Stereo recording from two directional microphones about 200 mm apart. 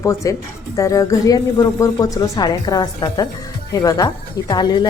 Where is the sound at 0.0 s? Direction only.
15° left (ahead or behind).